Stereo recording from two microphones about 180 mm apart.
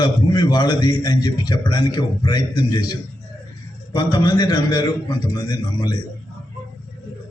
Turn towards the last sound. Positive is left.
turn(degrees=25)  # may be behind; listen again after turning